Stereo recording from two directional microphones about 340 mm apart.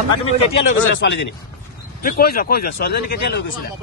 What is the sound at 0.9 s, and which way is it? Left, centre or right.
Speech, left.